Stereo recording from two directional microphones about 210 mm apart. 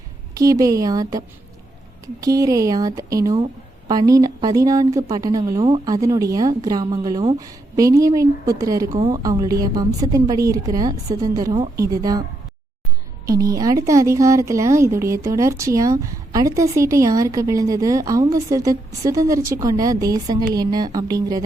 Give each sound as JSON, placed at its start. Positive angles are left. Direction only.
{"t": 0.3, "sound": "speech", "side_deg": -15}
{"t": 2.2, "sound": "speech", "side_deg": -15}
{"t": 13.2, "sound": "speech", "side_deg": -15}